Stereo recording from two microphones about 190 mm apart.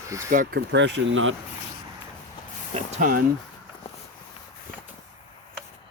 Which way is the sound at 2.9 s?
45° right (ahead or behind).